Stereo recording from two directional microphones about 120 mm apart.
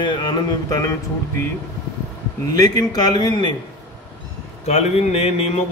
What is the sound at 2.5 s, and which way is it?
Speech, 30° left (ahead or behind).